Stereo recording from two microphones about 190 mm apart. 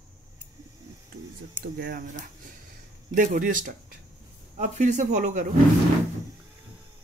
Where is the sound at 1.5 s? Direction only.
55° right (ahead or behind).